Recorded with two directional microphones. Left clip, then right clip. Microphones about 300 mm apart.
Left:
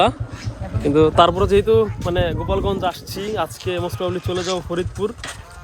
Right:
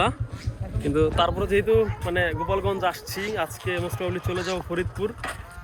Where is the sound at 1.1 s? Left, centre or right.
Left.